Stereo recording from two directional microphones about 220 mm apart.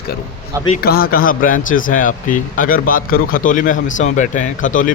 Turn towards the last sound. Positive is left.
turn(degrees=35)  # may be behind; listen again after turning